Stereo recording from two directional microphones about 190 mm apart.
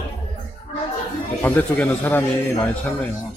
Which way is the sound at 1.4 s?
10° left (ahead or behind).